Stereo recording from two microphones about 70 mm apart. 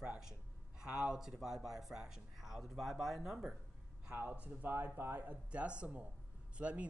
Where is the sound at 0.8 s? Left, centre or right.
Centre.